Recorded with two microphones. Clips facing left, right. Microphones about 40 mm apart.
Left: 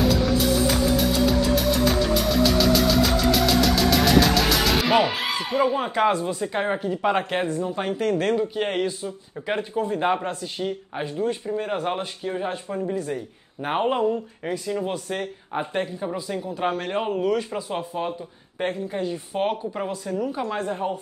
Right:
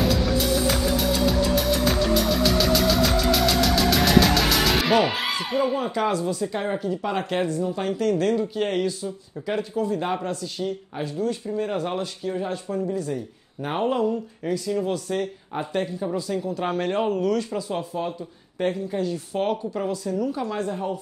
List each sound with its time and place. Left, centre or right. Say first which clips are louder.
0.0 s music: left 2 dB; centre
5.0 s speech: even; centre
5.8 s speech: left 2 dB; left; by 16.7 s centre
16.7 s a man's voice: right 2 dB; centre
17.0 s speech: left 2 dB; centre